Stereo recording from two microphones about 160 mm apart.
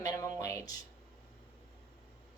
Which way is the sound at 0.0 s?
20° left (ahead or behind).